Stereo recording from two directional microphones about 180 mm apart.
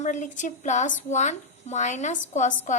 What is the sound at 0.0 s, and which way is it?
A woman's voice, 45° left (ahead or behind).